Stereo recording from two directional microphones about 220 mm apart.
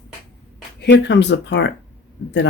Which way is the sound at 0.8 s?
55° left (ahead or behind).